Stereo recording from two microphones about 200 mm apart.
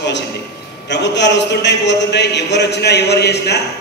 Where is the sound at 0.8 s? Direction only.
60° left (ahead or behind).